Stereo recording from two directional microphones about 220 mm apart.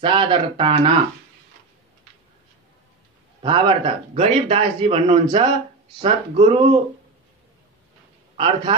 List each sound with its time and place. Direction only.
0.0 s speech: 20° right (ahead or behind)
3.4 s speech: 20° right (ahead or behind)
8.4 s speech: 20° right (ahead or behind)